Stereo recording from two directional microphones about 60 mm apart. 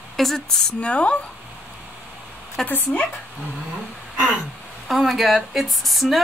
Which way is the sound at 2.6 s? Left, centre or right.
Left.